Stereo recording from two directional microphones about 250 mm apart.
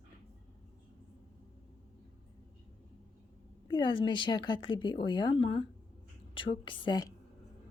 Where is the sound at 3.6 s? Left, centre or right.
Centre.